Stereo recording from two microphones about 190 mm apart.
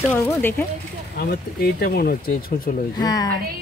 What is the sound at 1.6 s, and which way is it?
Speech, 55° left (ahead or behind).